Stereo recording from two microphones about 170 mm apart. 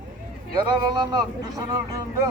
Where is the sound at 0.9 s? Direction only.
20° right (ahead or behind).